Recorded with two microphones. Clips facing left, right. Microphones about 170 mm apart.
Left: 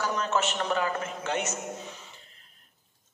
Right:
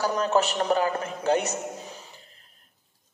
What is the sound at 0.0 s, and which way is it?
A man's voice, 35° right (ahead or behind).